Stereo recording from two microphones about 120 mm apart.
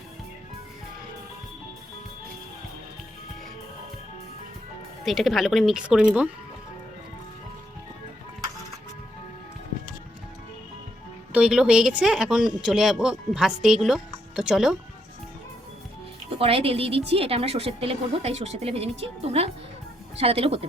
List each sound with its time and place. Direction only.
5.0 s a woman's voice: centre (ahead or behind)
11.3 s a woman's voice: 5° right (ahead or behind)
16.4 s a woman's voice: 50° right (ahead or behind)